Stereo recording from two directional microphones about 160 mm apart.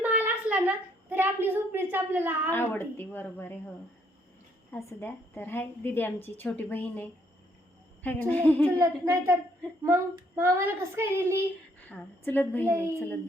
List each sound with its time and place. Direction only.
0.0 s a sound: 10° right (ahead or behind)
2.5 s a woman's voice: 15° left (ahead or behind)
4.7 s a woman's voice: 15° left (ahead or behind)
8.8 s speech: 15° right (ahead or behind)
11.9 s a woman's voice: 10° left (ahead or behind)
12.6 s speech: 15° right (ahead or behind)